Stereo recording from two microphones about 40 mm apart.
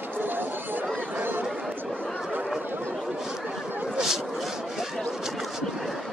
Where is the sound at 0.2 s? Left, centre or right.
Right.